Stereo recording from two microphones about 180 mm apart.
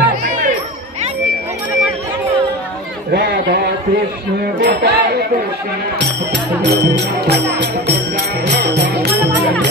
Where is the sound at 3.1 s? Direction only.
75° right (ahead or behind).